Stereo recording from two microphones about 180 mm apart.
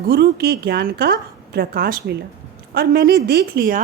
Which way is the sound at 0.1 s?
60° right (ahead or behind).